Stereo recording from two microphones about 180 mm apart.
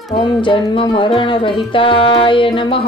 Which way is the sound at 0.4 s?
30° left (ahead or behind).